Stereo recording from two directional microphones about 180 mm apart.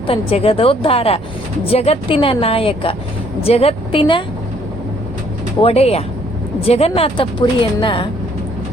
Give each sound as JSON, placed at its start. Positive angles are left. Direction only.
{"t": 0.1, "sound": "a woman's voice", "side_deg": 35}
{"t": 5.5, "sound": "a woman's voice", "side_deg": 35}